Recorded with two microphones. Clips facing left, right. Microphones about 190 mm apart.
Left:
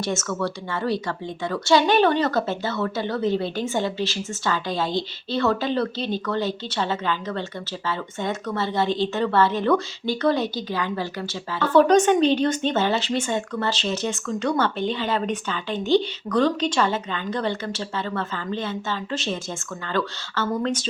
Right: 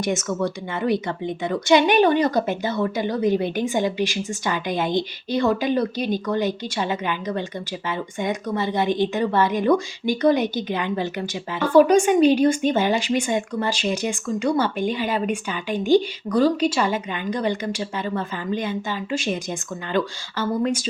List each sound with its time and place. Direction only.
0.0 s a woman's voice: 15° right (ahead or behind)